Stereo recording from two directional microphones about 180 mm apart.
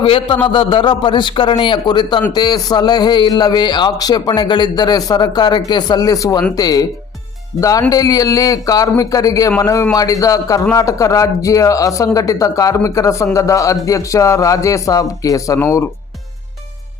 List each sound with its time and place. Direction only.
0.0 s a man's voice: 30° left (ahead or behind)